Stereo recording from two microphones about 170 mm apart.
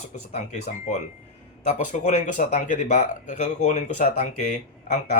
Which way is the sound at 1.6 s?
45° left (ahead or behind).